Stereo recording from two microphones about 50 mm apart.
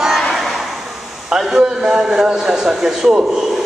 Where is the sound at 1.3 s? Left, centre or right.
Centre.